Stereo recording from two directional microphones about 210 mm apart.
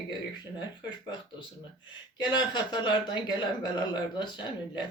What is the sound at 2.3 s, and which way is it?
Speech, 20° left (ahead or behind).